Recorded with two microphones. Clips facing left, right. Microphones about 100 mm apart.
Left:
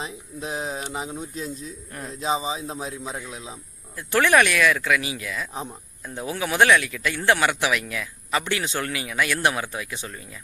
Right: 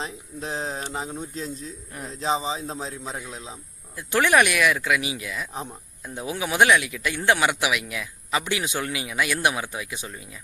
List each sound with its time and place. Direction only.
0.0 s speech: 15° left (ahead or behind)
3.9 s speech: 15° right (ahead or behind)